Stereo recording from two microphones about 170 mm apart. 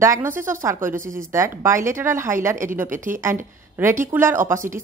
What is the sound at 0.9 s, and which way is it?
Speech, 50° right (ahead or behind).